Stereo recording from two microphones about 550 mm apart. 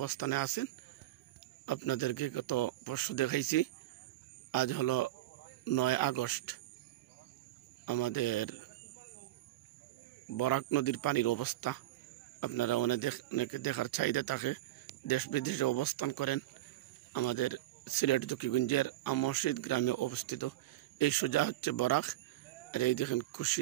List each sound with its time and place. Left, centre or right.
0.0 s speech: left
1.7 s speech: left
7.8 s speech: left
10.3 s speech: left